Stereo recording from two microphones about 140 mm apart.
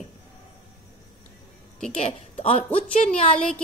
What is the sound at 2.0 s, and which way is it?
Speech, 50° left (ahead or behind).